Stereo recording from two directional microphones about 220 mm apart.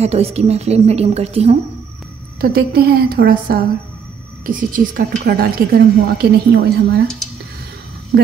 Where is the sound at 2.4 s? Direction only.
45° right (ahead or behind).